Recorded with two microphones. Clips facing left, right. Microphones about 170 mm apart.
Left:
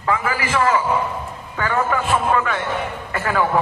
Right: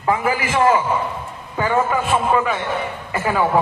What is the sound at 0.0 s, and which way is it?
Speech, 20° right (ahead or behind).